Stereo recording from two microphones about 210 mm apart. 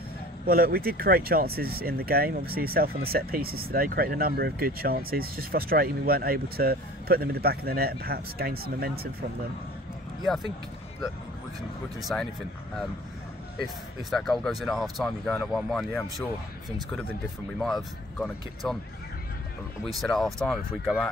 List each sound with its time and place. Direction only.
0.5 s speech: 45° right (ahead or behind)
10.2 s speech: centre (ahead or behind)
12.0 s speech: centre (ahead or behind)
14.1 s speech: centre (ahead or behind)
17.6 s speech: centre (ahead or behind)
19.9 s speech: centre (ahead or behind)